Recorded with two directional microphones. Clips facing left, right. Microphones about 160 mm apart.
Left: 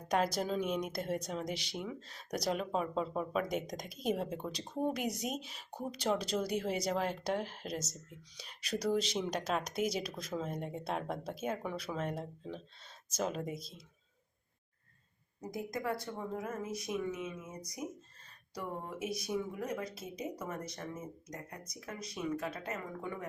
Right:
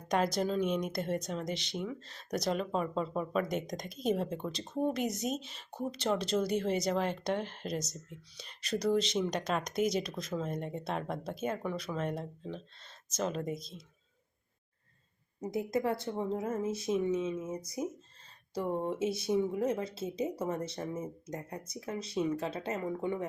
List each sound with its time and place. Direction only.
0.1 s speech: 5° left (ahead or behind)
15.4 s speech: 25° right (ahead or behind)